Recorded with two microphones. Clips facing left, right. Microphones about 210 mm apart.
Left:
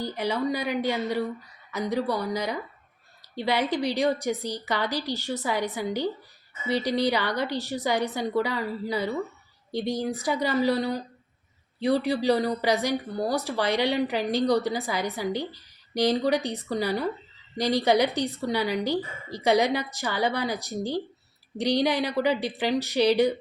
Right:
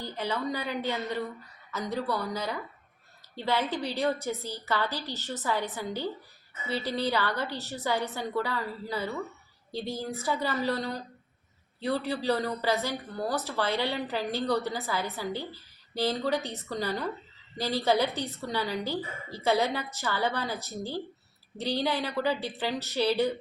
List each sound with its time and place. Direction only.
0.0 s a woman's voice: 10° left (ahead or behind)